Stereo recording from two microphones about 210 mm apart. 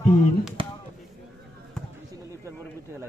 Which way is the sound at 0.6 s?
25° right (ahead or behind).